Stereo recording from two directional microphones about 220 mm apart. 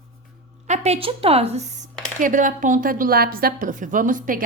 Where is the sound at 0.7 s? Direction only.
30° right (ahead or behind).